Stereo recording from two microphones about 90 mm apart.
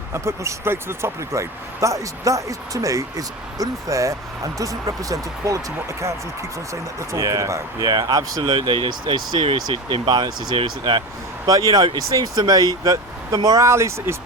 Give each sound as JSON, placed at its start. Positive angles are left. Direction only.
{"t": 0.1, "sound": "speech", "side_deg": -30}
{"t": 7.1, "sound": "speech", "side_deg": -35}
{"t": 7.9, "sound": "speech", "side_deg": -50}
{"t": 8.5, "sound": "speech", "side_deg": -75}
{"t": 11.4, "sound": "speech", "side_deg": -40}